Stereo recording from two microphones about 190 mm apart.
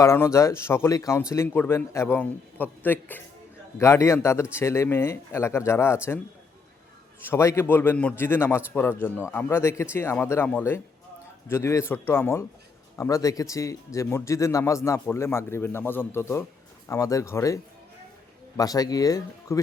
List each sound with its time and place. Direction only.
0.0 s a man's voice: 15° left (ahead or behind)
7.3 s a man's voice: 15° left (ahead or behind)